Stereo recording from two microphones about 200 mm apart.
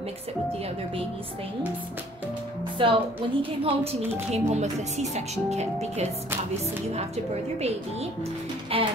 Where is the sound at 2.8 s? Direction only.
25° right (ahead or behind).